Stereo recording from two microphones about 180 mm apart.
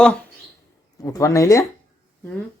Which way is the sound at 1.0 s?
15° left (ahead or behind).